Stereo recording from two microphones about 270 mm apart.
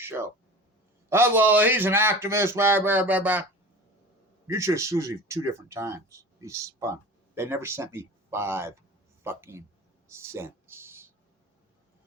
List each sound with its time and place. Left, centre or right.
0.0 s speech: centre
4.4 s speech: centre
10.1 s a sound: centre